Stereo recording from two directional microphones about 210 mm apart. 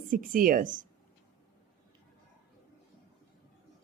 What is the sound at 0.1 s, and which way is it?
Speech, 40° right (ahead or behind).